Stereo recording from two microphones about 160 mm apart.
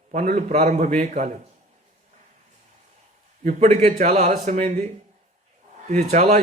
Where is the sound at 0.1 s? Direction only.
50° right (ahead or behind).